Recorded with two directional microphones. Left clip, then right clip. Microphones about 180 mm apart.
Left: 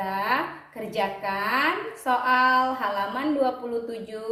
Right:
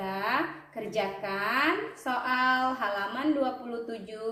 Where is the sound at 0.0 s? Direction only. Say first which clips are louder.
Left 5 dB; 20° left (ahead or behind).